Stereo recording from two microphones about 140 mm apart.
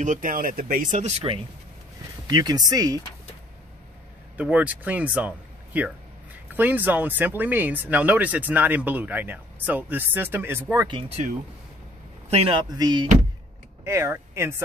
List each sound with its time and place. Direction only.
0.0 s speech: 70° right (ahead or behind)
2.2 s speech: 30° right (ahead or behind)
4.4 s speech: 10° right (ahead or behind)
10.9 s speech: 45° right (ahead or behind)
13.8 s speech: 20° right (ahead or behind)